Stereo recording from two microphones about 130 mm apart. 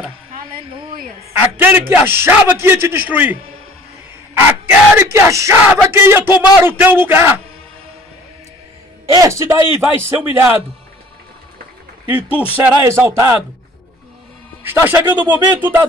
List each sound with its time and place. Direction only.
0.3 s speech: 40° right (ahead or behind)
1.3 s a man's voice: 15° right (ahead or behind)
4.6 s a man's voice: 20° right (ahead or behind)
9.1 s a man's voice: 25° right (ahead or behind)
12.1 s a man's voice: 10° right (ahead or behind)
14.6 s a man's voice: 15° right (ahead or behind)